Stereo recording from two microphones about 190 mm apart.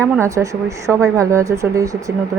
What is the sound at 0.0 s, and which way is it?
Speech, 15° right (ahead or behind).